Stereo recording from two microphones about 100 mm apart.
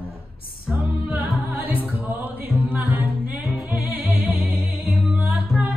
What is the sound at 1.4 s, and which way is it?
Music, 15° right (ahead or behind).